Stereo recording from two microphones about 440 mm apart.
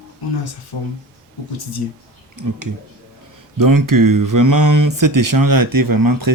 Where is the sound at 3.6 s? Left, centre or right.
Right.